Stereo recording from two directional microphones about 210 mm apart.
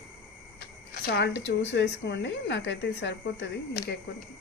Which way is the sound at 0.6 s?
50° left (ahead or behind).